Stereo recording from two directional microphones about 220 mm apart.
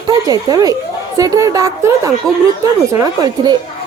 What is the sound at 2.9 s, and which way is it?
Speech, 15° right (ahead or behind).